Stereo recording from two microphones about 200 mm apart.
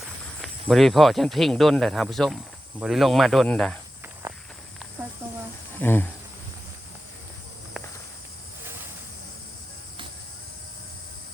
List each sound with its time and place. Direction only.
0.4 s speech: centre (ahead or behind)
4.2 s walk: 15° right (ahead or behind)
5.8 s speech: 10° left (ahead or behind)
7.8 s walk: centre (ahead or behind)